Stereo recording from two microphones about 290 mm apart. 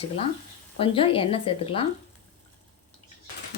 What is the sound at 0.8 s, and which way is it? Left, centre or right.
Speech, centre.